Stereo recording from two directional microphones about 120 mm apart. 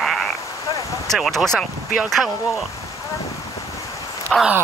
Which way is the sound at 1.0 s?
Centre (ahead or behind).